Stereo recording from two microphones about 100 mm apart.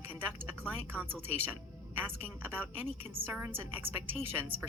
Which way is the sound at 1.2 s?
20° right (ahead or behind).